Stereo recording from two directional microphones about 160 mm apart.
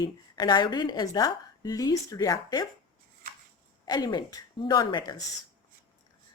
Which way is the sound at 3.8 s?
25° left (ahead or behind).